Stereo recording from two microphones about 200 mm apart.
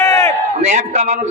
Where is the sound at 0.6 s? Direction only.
35° right (ahead or behind).